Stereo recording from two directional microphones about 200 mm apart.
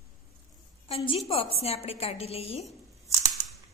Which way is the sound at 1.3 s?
30° left (ahead or behind).